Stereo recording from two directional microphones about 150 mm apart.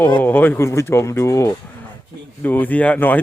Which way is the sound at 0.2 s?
15° left (ahead or behind).